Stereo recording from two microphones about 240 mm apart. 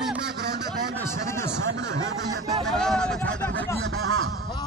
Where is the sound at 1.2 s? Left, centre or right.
Centre.